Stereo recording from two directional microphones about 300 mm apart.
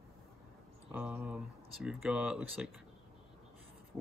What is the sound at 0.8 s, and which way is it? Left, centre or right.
Speech, centre.